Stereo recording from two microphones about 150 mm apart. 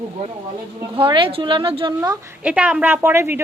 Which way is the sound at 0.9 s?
35° right (ahead or behind).